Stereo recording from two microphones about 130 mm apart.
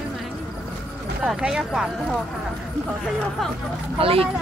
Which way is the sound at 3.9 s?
45° right (ahead or behind).